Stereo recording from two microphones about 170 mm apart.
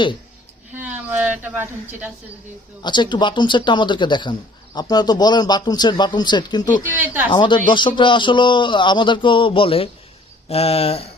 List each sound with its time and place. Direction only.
0.7 s a woman's voice: 10° right (ahead or behind)
2.8 s speech: 25° left (ahead or behind)
6.8 s speech: 10° right (ahead or behind)
7.3 s speech: 30° left (ahead or behind)
10.5 s a sound: 35° left (ahead or behind)